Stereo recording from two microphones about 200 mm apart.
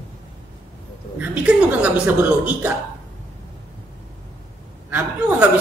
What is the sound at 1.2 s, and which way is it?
A woman's voice, 5° right (ahead or behind).